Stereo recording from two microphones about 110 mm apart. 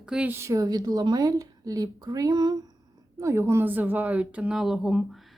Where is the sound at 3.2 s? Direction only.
25° right (ahead or behind).